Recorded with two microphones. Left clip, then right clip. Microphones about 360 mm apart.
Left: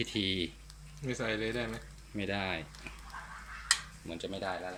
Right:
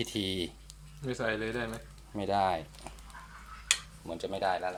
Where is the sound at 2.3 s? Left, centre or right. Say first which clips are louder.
Right 8 dB; centre.